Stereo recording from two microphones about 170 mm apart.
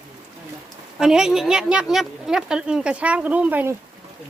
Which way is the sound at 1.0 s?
5° right (ahead or behind).